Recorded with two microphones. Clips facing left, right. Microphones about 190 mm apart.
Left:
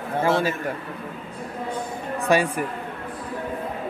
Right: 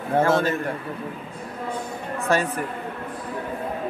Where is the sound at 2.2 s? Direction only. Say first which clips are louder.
Left 2 dB; 15° left (ahead or behind).